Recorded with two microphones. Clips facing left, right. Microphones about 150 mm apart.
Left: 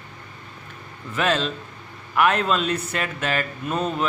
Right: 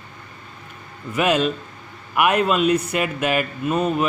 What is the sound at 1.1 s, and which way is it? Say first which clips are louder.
Speech: right 4 dB; 10° right (ahead or behind).